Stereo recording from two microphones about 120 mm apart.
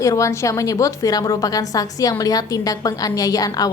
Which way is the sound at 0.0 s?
25° left (ahead or behind).